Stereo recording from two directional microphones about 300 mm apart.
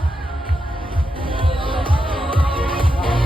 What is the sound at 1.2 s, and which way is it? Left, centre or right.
Music, centre.